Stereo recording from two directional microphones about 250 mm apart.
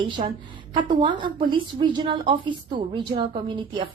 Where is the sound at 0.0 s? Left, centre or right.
Right.